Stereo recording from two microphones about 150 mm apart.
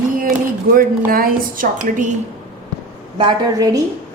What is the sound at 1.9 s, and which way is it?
Speech, 55° right (ahead or behind).